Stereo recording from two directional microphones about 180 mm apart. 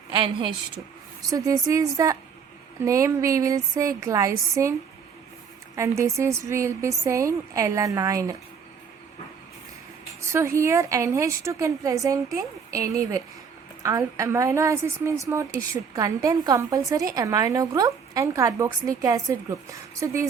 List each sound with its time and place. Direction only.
0.1 s a woman's voice: 25° right (ahead or behind)
6.0 s a woman's voice: 15° right (ahead or behind)
10.2 s a woman's voice: 15° right (ahead or behind)